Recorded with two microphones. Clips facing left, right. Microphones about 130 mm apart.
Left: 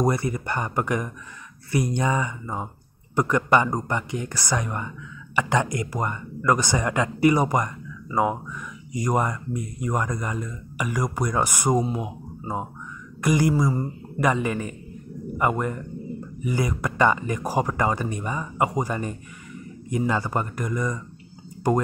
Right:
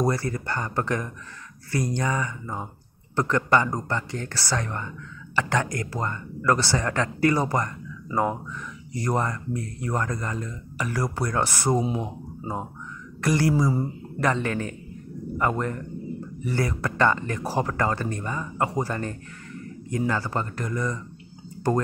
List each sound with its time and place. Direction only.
0.0 s speech: 20° left (ahead or behind)
13.2 s speech: 15° left (ahead or behind)
13.6 s a man's voice: 5° right (ahead or behind)
14.2 s speech: 10° left (ahead or behind)